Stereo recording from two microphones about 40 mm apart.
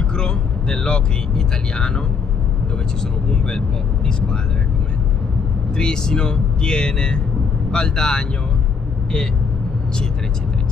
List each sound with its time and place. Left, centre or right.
0.1 s speech: left
3.3 s speech: centre
5.8 s speech: centre